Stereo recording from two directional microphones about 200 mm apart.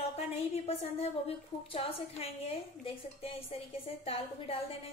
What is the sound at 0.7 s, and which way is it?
A woman's voice, 30° left (ahead or behind).